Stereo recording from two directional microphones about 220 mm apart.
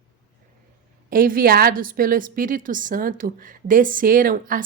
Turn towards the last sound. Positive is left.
turn(degrees=-40)  # may be behind; listen again after turning